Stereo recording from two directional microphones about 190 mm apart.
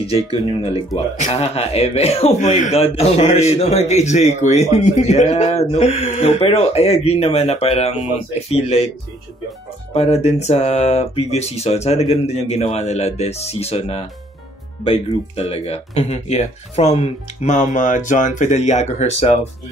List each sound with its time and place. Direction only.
0.5 s speech: 30° left (ahead or behind)
9.9 s speech: 35° left (ahead or behind)